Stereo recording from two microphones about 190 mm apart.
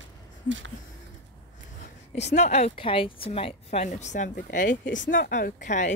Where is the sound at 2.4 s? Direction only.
35° left (ahead or behind).